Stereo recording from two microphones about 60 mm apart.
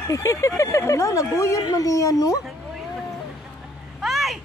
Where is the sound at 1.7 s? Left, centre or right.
Left.